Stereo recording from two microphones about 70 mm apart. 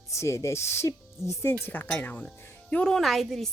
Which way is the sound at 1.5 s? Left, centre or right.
Left.